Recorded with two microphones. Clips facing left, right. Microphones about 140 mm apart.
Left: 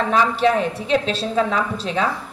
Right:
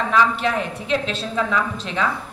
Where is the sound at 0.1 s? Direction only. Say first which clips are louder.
Left 2 dB; 30° left (ahead or behind).